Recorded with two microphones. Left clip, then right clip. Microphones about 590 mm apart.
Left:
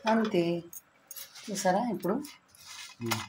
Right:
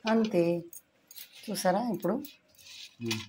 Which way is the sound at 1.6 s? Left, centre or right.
Right.